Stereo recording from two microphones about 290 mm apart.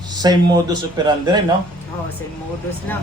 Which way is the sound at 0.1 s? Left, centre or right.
Centre.